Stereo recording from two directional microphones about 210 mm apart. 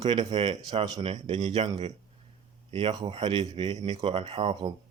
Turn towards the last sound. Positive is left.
turn(degrees=-25)  # may be behind; listen again after turning